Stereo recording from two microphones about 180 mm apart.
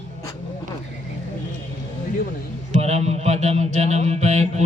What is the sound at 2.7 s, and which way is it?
Mantra, 35° right (ahead or behind).